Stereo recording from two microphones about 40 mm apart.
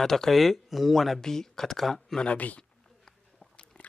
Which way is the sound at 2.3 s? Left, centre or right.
Left.